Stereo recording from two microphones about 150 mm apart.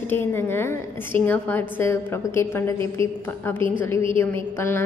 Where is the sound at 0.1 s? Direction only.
15° left (ahead or behind).